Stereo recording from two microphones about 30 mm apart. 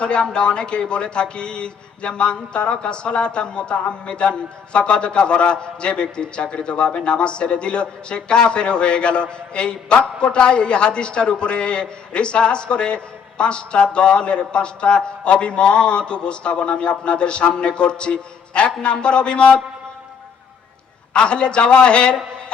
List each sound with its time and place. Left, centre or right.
0.0 s speech: left
21.1 s a man's voice: left